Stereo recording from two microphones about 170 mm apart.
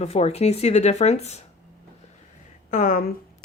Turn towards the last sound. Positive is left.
turn(degrees=55)  # may be behind; listen again after turning